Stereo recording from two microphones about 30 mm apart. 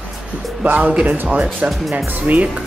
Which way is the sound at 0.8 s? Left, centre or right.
Right.